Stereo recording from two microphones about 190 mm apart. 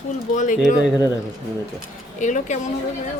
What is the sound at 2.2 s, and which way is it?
Speech, 40° left (ahead or behind).